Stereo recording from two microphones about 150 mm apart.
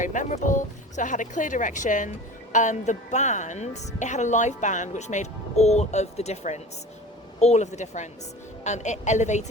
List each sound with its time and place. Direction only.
0.0 s speech: 55° left (ahead or behind)